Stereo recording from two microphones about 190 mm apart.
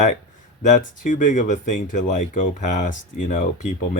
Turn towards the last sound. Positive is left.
turn(degrees=40)  # may be behind; listen again after turning